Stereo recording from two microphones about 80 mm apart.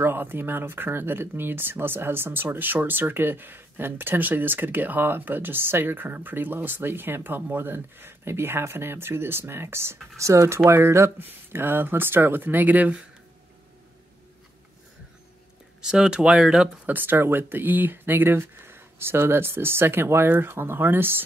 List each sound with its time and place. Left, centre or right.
0.0 s speech: right
15.8 s speech: centre
16.8 s speech: right